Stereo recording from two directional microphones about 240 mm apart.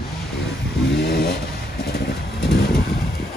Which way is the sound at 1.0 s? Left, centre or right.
Left.